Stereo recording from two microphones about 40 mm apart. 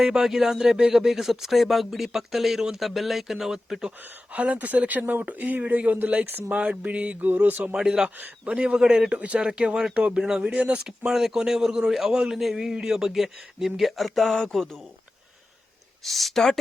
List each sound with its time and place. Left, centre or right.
0.0 s speech: centre
4.3 s speech: right
6.5 s speech: right
7.7 s a man's voice: centre; by 9.4 s right
9.4 s a man's voice: right
10.5 s speech: right
10.8 s speech: centre
16.0 s speech: centre